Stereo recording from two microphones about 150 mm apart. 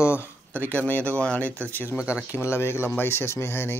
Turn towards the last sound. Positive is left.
turn(degrees=15)  # may be behind; listen again after turning